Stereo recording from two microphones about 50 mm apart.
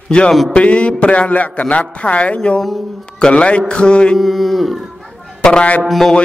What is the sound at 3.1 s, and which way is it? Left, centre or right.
A man's voice, left.